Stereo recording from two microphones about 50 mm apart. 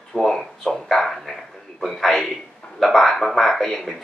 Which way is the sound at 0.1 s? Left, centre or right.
Centre.